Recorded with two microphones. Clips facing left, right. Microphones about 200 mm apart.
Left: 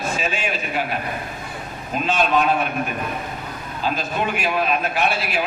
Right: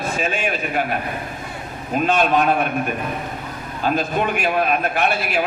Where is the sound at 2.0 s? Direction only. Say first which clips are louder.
Right 2 dB; 50° right (ahead or behind).